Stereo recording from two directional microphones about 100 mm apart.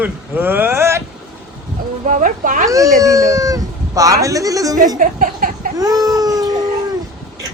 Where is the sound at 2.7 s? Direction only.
35° right (ahead or behind).